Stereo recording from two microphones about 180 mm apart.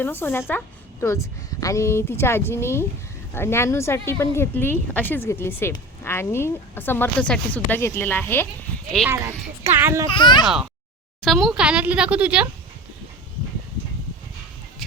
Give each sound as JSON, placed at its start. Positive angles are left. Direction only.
{"t": 0.0, "sound": "speech", "side_deg": 10}
{"t": 9.0, "sound": "speech", "side_deg": -15}
{"t": 10.1, "sound": "speech", "side_deg": 25}
{"t": 10.4, "sound": "speech", "side_deg": 0}